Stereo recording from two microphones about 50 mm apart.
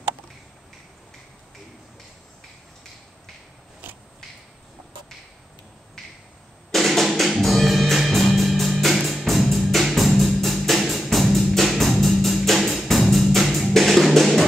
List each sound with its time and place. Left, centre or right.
6.7 s music: centre